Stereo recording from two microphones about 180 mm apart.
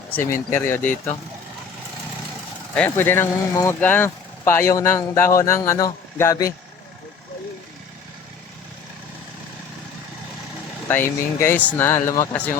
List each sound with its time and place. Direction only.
0.1 s speech: 10° left (ahead or behind)
2.7 s speech: 10° left (ahead or behind)
10.8 s speech: 10° left (ahead or behind)